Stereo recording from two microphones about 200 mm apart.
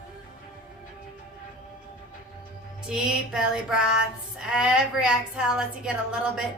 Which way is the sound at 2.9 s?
5° right (ahead or behind).